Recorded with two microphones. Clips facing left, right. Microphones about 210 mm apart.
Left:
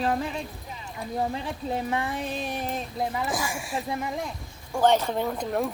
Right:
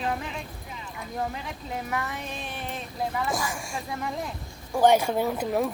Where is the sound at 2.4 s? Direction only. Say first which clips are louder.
Left 5 dB; 40° left (ahead or behind).